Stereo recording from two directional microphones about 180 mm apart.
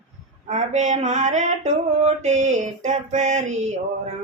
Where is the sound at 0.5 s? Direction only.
40° right (ahead or behind).